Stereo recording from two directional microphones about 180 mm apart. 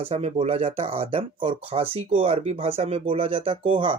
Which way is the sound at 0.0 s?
35° right (ahead or behind).